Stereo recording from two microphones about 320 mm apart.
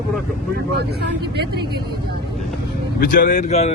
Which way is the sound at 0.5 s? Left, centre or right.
Right.